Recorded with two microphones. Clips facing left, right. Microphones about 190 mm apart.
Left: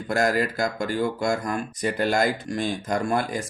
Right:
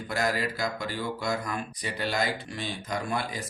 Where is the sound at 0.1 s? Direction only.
50° left (ahead or behind).